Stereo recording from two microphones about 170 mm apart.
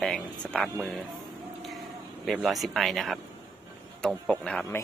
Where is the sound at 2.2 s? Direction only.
Centre (ahead or behind).